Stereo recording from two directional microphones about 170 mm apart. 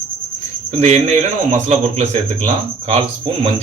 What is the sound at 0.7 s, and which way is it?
Speech, 40° right (ahead or behind).